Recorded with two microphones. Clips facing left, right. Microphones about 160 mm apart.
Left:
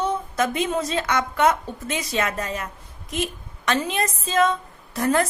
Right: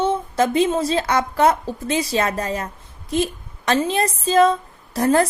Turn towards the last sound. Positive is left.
turn(degrees=-35)  # may be behind; listen again after turning